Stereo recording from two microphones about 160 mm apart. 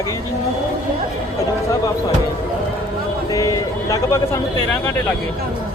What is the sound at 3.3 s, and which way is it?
Speech, 20° left (ahead or behind).